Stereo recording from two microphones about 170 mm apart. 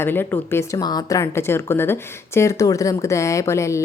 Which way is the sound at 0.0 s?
10° left (ahead or behind).